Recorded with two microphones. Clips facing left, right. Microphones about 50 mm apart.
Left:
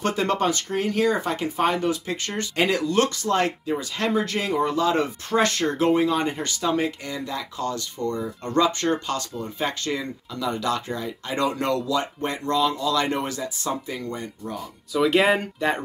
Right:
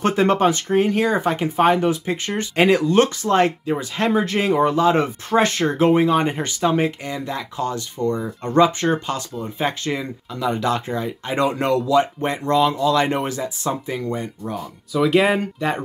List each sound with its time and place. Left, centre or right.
0.0 s speech: right
14.9 s speech: centre